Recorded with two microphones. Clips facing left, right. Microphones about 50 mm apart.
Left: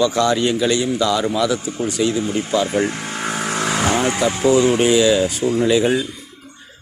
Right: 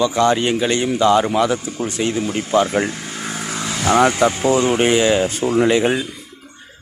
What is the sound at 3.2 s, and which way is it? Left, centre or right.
Vehicle, left.